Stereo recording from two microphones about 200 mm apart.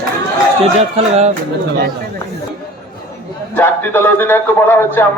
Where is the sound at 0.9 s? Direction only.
30° right (ahead or behind).